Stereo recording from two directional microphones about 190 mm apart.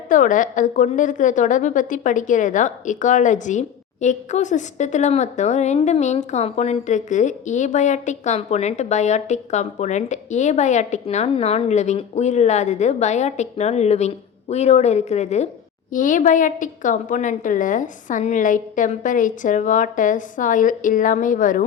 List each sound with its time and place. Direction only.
0.1 s a woman's voice: 45° left (ahead or behind)